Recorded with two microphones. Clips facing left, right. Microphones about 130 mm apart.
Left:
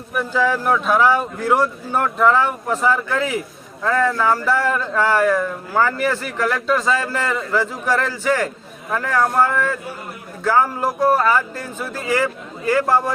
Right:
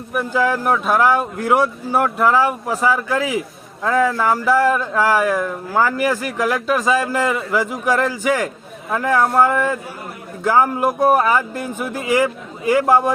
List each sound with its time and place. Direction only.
0.1 s speech: 10° right (ahead or behind)